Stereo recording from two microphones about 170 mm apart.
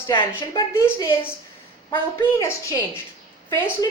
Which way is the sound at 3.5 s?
15° left (ahead or behind).